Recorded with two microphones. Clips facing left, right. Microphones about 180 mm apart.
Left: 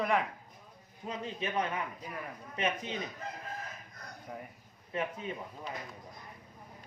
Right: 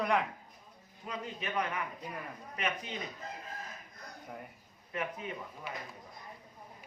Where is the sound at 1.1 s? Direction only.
25° left (ahead or behind).